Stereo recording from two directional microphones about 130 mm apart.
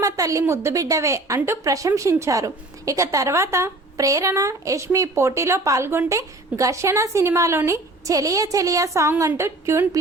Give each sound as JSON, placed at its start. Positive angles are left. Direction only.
{"t": 0.0, "sound": "a woman's voice", "side_deg": -25}